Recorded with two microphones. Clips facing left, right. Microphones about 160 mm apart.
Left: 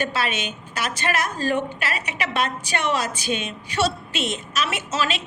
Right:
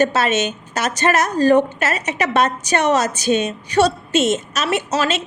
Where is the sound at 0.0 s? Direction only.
45° right (ahead or behind).